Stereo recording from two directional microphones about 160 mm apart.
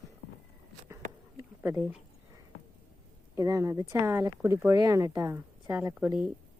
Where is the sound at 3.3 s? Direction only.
20° right (ahead or behind).